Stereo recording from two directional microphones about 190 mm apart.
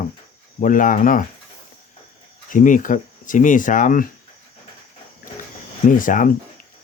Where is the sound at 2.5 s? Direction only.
45° left (ahead or behind).